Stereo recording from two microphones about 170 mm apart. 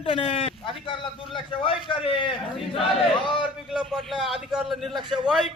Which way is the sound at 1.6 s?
30° left (ahead or behind).